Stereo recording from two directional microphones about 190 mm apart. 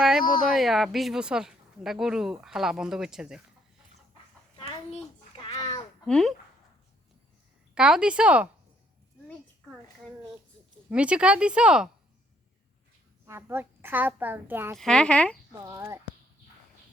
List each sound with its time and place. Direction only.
0.5 s speech: centre (ahead or behind)
5.4 s a sound: 35° left (ahead or behind)
6.1 s speech: centre (ahead or behind)
7.8 s speech: 5° right (ahead or behind)
10.8 s speech: 5° right (ahead or behind)
13.2 s a woman's voice: 15° right (ahead or behind)
14.8 s speech: 5° left (ahead or behind)
15.6 s a woman's voice: 15° right (ahead or behind)